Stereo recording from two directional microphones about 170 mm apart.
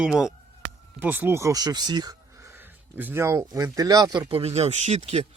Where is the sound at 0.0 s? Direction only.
5° right (ahead or behind); by 2.1 s 25° right (ahead or behind).